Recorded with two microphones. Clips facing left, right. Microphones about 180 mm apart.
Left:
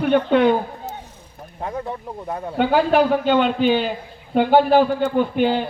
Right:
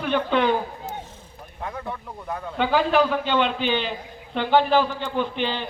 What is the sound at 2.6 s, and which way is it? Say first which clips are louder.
A man's voice: left 4 dB; 50° left (ahead or behind).